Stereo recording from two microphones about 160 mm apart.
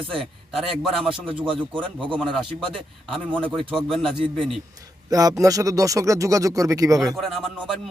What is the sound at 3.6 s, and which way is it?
Speech, 35° right (ahead or behind).